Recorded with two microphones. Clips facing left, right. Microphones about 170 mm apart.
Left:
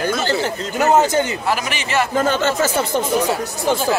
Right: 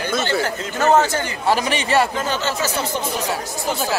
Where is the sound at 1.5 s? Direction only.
35° right (ahead or behind).